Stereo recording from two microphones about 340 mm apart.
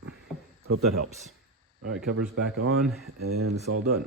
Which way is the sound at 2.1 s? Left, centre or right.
Right.